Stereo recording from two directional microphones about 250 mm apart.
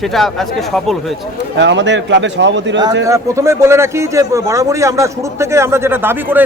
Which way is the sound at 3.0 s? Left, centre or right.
Centre.